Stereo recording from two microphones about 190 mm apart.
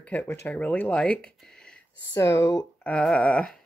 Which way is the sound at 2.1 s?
15° left (ahead or behind).